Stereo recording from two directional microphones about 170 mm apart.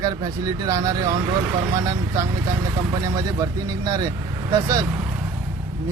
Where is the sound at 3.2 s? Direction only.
20° right (ahead or behind).